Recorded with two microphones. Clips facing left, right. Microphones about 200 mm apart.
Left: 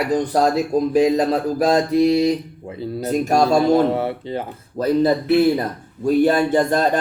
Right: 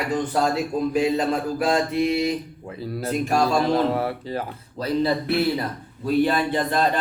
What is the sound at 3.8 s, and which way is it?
Speech, 25° left (ahead or behind).